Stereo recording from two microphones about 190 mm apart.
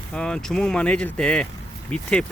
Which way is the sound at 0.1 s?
5° left (ahead or behind).